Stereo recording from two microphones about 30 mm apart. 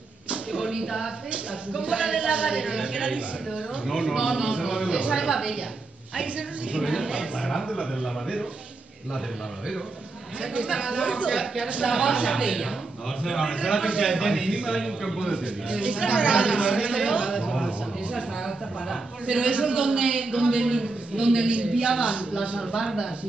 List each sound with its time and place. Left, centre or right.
0.5 s a sound: right
1.7 s a man's voice: right
4.0 s a woman's voice: right
6.1 s a man's voice: right
7.4 s a man's voice: centre
10.4 s a man's voice: right
13.2 s a woman's voice: centre
13.6 s a man's voice: right
14.8 s a man's voice: centre
15.3 s a man's voice: right
17.6 s a sound: right
19.2 s a man's voice: right
22.6 s a woman's voice: right